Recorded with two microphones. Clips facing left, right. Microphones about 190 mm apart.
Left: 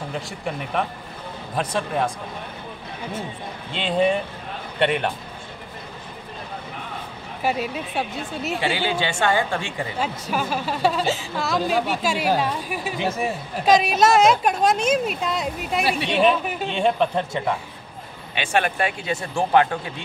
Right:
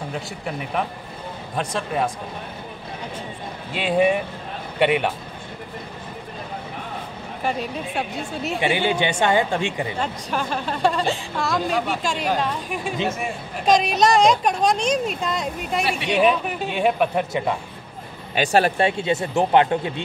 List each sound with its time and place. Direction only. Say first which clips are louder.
0.1 s a woman's voice: even; centre (ahead or behind)
3.7 s speech: right 2 dB; 10° right (ahead or behind)
7.4 s a woman's voice: left 1 dB; 5° left (ahead or behind)
8.5 s speech: right 3 dB; 20° right (ahead or behind)
9.9 s a woman's voice: even; 5° left (ahead or behind); by 17.6 s 15° right (ahead or behind)
18.3 s speech: right 4 dB; 35° right (ahead or behind)